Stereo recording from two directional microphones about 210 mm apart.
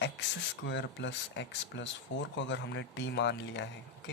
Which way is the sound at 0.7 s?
55° left (ahead or behind).